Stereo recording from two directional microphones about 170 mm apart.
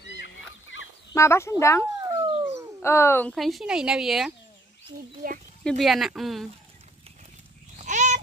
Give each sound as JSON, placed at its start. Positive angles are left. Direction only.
{"t": 0.0, "sound": "fowl", "side_deg": 90}
{"t": 1.1, "sound": "speech", "side_deg": 15}
{"t": 2.0, "sound": "dog", "side_deg": -20}
{"t": 2.4, "sound": "a sound", "side_deg": -15}
{"t": 2.8, "sound": "a woman's voice", "side_deg": 15}
{"t": 5.6, "sound": "a woman's voice", "side_deg": 0}
{"t": 7.8, "sound": "a sound", "side_deg": -45}